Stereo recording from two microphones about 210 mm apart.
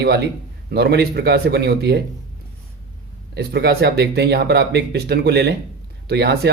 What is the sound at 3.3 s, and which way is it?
Speech, 50° right (ahead or behind).